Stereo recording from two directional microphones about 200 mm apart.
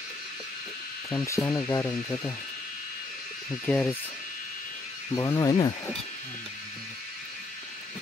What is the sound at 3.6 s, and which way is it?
Speech, 5° left (ahead or behind).